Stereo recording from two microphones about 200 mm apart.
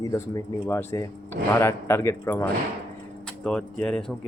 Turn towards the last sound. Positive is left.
turn(degrees=5)  # may be behind; listen again after turning